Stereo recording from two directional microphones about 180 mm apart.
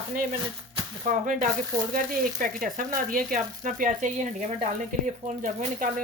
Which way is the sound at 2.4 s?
50° right (ahead or behind).